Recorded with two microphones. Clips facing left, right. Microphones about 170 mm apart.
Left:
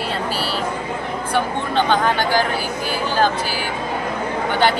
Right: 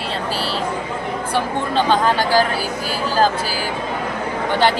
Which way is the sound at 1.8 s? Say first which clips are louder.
Right 1 dB; 35° right (ahead or behind).